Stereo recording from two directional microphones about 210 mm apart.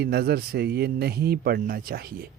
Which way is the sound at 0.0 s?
45° right (ahead or behind).